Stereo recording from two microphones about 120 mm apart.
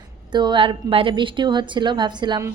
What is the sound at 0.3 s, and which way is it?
A woman's voice, 40° right (ahead or behind).